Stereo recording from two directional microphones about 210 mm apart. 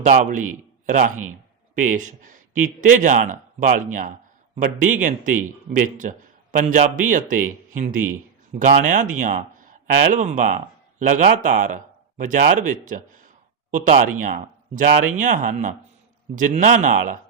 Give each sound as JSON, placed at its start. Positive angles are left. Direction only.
{"t": 0.0, "sound": "a man's voice", "side_deg": -35}